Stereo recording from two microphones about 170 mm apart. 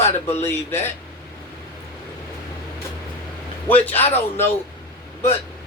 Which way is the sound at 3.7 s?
10° left (ahead or behind).